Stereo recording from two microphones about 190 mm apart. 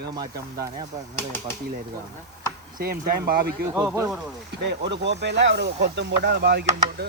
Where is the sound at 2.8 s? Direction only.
55° right (ahead or behind).